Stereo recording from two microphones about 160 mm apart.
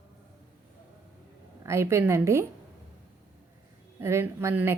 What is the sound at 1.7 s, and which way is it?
Speech, 15° right (ahead or behind).